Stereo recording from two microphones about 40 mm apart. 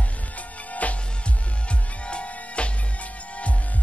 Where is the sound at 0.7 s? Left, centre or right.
Left.